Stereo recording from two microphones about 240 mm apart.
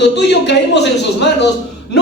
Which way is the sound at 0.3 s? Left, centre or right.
Left.